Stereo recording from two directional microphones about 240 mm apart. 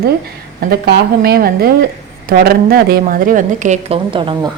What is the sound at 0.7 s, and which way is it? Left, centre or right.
A woman's voice, right.